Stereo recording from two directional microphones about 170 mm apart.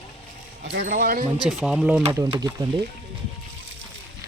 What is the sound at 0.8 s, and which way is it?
Speech, 55° right (ahead or behind).